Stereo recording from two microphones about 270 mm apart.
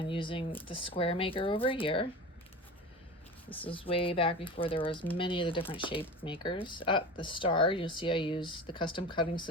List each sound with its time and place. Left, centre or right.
0.0 s speech: centre
3.7 s a woman's voice: centre